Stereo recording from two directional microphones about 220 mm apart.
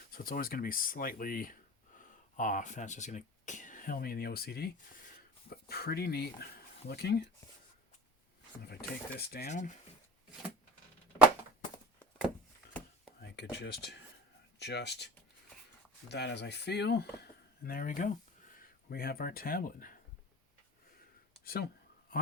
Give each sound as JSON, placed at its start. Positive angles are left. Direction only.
{"t": 0.1, "sound": "speech", "side_deg": 40}
{"t": 8.6, "sound": "speech", "side_deg": 45}
{"t": 9.5, "sound": "speech", "side_deg": 35}
{"t": 13.1, "sound": "speech", "side_deg": 50}
{"t": 21.4, "sound": "speech", "side_deg": 45}